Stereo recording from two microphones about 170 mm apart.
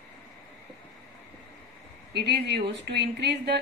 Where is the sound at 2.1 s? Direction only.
80° right.